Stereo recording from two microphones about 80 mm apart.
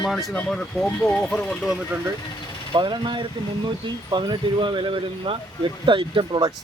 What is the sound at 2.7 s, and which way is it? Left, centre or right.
Speech, right.